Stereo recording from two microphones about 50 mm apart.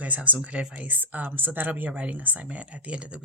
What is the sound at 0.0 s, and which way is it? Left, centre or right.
Speech, right.